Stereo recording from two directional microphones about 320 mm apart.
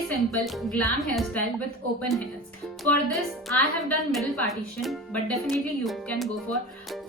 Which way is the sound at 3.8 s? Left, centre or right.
Centre.